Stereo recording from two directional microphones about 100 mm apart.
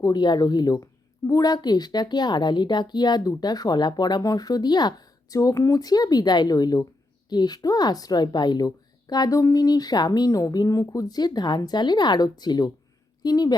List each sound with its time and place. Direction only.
0.0 s speech: 45° left (ahead or behind)